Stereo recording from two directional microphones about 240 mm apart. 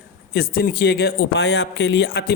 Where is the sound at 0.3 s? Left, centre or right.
Left.